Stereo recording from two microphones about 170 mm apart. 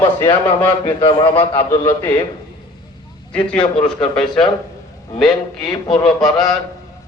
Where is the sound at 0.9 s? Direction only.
30° left (ahead or behind).